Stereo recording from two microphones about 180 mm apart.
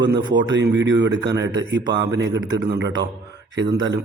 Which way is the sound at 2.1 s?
75° right (ahead or behind).